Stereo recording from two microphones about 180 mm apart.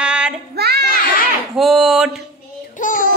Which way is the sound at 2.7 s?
45° left (ahead or behind).